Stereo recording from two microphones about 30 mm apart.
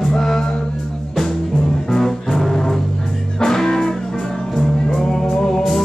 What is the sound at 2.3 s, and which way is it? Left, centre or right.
Music, centre.